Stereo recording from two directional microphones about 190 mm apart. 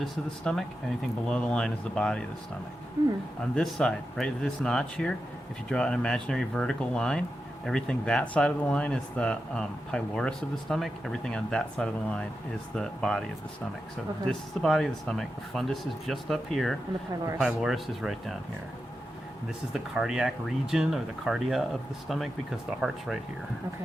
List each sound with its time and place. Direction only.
0.0 s speech: centre (ahead or behind)
3.5 s speech: 5° left (ahead or behind)
14.3 s speech: centre (ahead or behind)
17.1 s speech: 15° right (ahead or behind)
17.4 s speech: centre (ahead or behind)
19.7 s speech: 5° right (ahead or behind)